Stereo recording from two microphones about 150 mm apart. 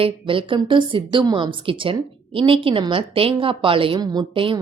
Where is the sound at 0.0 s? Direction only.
35° right (ahead or behind).